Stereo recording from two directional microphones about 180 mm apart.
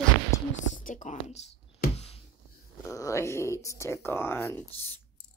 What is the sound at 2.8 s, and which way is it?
Speech, 15° left (ahead or behind).